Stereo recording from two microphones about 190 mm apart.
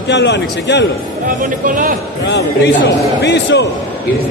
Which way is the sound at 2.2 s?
65° left (ahead or behind).